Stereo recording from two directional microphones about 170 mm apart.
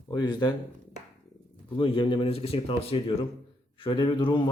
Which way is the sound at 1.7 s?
30° left (ahead or behind).